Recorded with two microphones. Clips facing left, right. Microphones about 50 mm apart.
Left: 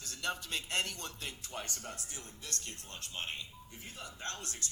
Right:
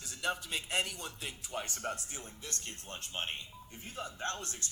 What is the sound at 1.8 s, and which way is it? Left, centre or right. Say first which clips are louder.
Speech: right 6 dB; right.